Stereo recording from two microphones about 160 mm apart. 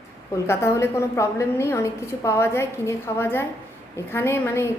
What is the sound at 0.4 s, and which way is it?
A woman's voice, 15° left (ahead or behind).